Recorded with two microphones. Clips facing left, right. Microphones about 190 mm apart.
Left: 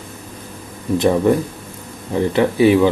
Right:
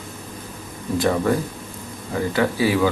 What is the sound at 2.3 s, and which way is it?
Speech, 25° left (ahead or behind).